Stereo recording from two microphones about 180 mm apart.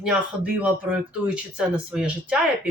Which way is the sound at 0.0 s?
5° right (ahead or behind).